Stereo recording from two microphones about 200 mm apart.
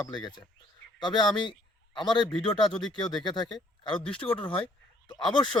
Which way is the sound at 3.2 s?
20° left (ahead or behind).